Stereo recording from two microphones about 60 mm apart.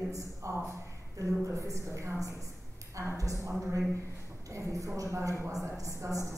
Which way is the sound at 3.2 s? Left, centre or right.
Right.